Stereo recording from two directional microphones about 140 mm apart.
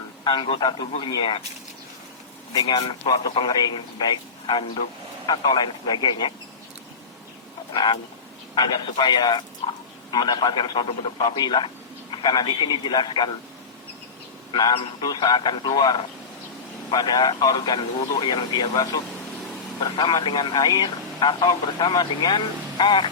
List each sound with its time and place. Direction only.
0.3 s speech: 35° left (ahead or behind)
2.5 s speech: 30° left (ahead or behind)
8.5 s speech: 30° left (ahead or behind)
14.5 s speech: 35° left (ahead or behind)